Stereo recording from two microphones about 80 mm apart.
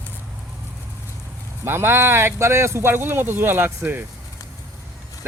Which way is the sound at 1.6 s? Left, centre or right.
Right.